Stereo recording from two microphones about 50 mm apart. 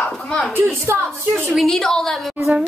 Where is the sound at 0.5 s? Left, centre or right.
Right.